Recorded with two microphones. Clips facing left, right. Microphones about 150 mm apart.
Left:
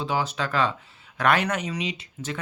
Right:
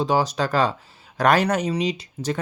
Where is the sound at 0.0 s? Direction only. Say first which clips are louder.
Right 6 dB; 40° right (ahead or behind).